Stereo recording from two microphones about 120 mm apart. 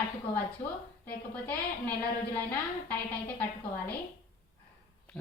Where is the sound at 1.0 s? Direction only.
15° left (ahead or behind).